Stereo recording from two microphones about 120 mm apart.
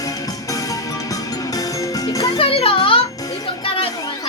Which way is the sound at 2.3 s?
50° left (ahead or behind).